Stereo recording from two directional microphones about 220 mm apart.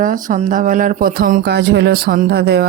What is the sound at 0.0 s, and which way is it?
A woman's voice, 35° right (ahead or behind).